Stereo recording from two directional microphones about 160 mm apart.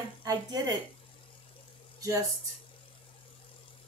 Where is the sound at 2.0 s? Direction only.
20° right (ahead or behind).